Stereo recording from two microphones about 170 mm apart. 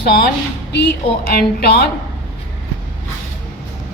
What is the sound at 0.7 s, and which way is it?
A woman's voice, 75° left (ahead or behind).